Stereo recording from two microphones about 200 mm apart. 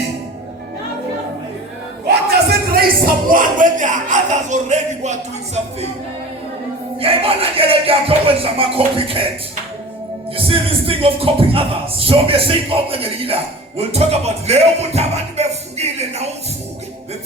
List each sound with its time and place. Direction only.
2.0 s a sound: 50° right (ahead or behind)
3.2 s speech: 40° right (ahead or behind)
7.0 s speech: 30° right (ahead or behind)
10.3 s speech: 30° right (ahead or behind)